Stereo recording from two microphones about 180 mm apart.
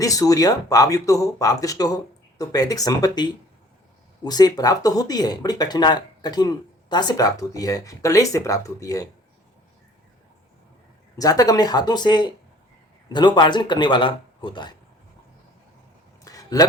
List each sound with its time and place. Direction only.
0.0 s speech: 20° left (ahead or behind)
11.2 s speech: 20° left (ahead or behind)
16.2 s a sound: 20° left (ahead or behind)